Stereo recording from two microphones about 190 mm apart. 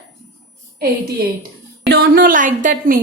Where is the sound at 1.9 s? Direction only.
50° right (ahead or behind).